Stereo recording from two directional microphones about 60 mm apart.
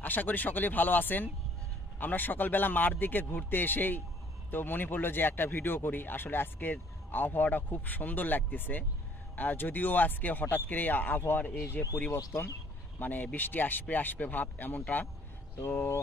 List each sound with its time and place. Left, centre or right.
0.0 s speech: left
11.8 s speech: left
13.0 s speech: left